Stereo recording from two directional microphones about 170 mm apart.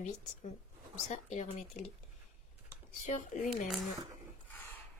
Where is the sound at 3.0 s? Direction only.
45° left (ahead or behind).